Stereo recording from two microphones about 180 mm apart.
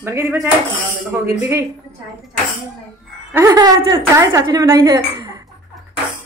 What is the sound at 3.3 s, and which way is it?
Speech, 15° right (ahead or behind).